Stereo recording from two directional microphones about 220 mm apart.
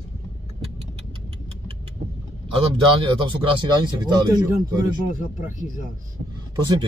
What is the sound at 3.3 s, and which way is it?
Speech, 20° right (ahead or behind).